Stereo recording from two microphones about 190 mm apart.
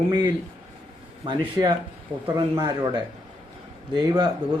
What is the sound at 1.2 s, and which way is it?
A man's voice, 25° right (ahead or behind).